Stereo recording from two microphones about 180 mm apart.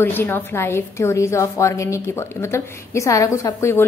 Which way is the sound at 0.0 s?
10° left (ahead or behind).